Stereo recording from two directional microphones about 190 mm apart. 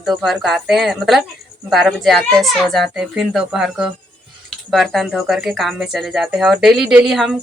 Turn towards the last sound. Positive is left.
turn(degrees=0)  # may be behind; listen again after turning